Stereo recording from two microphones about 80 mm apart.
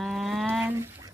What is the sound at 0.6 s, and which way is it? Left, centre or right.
Speech, right.